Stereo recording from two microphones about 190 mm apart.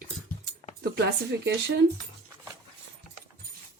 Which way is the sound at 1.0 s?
60° right (ahead or behind).